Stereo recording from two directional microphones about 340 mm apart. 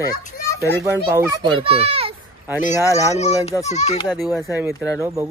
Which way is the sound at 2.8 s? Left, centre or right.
Centre.